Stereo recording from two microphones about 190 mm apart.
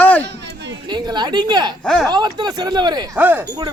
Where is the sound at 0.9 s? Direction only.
20° right (ahead or behind).